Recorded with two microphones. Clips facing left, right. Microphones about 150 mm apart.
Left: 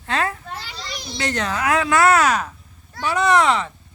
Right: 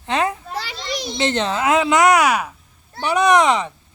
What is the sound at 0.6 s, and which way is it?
Children playing, 90° right.